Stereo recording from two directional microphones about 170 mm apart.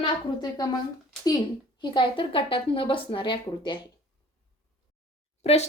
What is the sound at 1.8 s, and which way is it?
Speech, 30° left (ahead or behind).